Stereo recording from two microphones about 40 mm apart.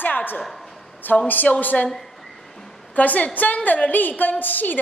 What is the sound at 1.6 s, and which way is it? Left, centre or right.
Speech, left.